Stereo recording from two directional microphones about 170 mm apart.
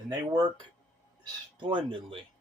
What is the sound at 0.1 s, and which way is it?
Speech, 25° right (ahead or behind).